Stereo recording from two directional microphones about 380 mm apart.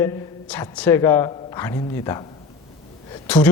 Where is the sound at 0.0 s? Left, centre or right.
Centre.